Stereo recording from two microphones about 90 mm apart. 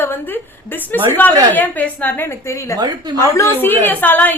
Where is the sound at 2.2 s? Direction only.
35° left (ahead or behind).